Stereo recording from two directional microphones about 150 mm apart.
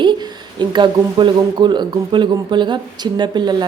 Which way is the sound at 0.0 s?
30° right (ahead or behind).